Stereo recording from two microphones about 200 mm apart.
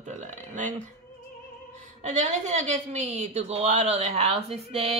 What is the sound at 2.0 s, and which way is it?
Speech, 35° right (ahead or behind).